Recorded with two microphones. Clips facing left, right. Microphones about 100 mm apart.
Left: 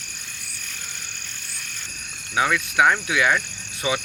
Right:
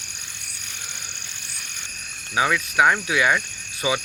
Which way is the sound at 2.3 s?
Centre (ahead or behind).